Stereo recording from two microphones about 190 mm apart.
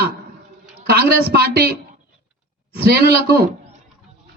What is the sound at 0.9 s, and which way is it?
Speech, 55° right (ahead or behind).